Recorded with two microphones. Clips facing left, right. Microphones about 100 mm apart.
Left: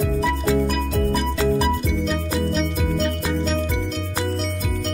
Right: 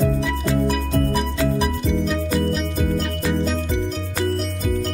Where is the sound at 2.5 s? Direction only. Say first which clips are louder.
Even; 5° right (ahead or behind).